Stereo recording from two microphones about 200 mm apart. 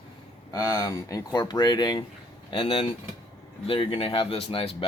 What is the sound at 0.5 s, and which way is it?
Speech, 20° left (ahead or behind).